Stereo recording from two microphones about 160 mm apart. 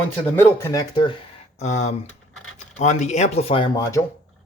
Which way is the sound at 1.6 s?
45° left (ahead or behind).